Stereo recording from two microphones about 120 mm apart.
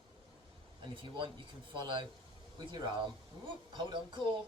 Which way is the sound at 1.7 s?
40° right (ahead or behind).